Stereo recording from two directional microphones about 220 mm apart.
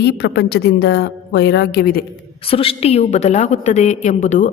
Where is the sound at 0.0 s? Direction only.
50° left (ahead or behind).